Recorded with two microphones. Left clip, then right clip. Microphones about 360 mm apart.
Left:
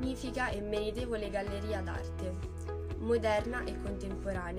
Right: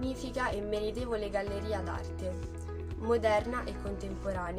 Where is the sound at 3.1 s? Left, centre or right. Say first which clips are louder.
Right 2 dB; right.